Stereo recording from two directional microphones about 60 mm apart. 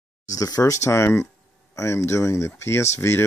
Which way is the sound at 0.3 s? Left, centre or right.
Left.